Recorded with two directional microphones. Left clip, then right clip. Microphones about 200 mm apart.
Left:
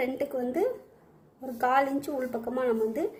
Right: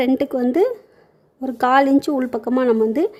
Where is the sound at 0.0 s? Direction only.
45° right (ahead or behind).